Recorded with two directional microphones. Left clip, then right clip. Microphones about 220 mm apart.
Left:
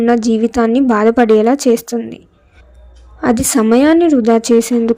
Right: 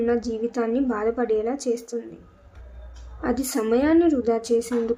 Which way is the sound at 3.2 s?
35° left (ahead or behind).